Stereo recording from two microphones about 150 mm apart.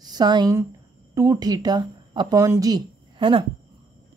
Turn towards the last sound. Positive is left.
turn(degrees=-35)  # may be behind; listen again after turning